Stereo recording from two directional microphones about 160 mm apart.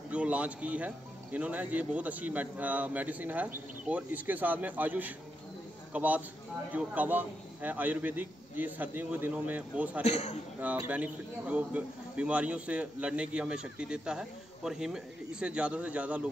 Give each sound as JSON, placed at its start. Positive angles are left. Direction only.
{"t": 0.1, "sound": "a man's voice", "side_deg": -10}
{"t": 10.0, "sound": "speech", "side_deg": 40}
{"t": 10.9, "sound": "a man's voice", "side_deg": -10}